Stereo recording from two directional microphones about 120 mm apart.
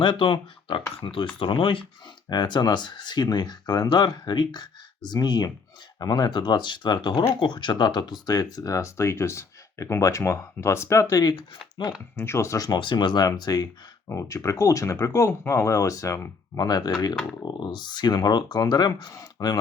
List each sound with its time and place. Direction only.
0.0 s speech: 45° left (ahead or behind)
12.1 s speech: 20° left (ahead or behind)